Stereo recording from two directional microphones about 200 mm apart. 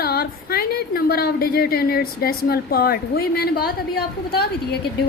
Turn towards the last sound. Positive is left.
turn(degrees=50)  # may be behind; listen again after turning